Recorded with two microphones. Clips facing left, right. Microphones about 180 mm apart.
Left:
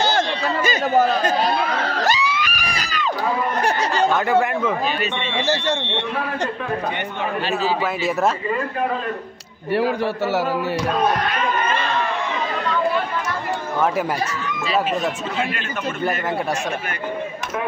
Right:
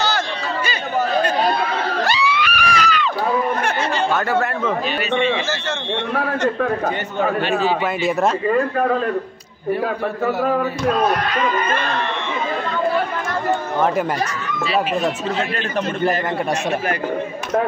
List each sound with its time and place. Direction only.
0.7 s chatter: 45° left (ahead or behind)
2.0 s screaming: 40° left (ahead or behind)
4.3 s a man's voice: 15° left (ahead or behind)
9.7 s a man's voice: 85° left